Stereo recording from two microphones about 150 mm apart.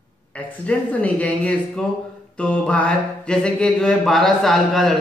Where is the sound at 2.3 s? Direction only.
5° left (ahead or behind).